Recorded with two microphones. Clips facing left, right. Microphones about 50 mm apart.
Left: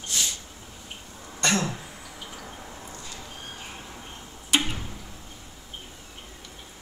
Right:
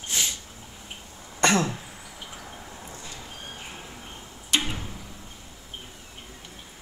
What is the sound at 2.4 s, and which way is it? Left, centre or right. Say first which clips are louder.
Drip: left 1 dB; centre.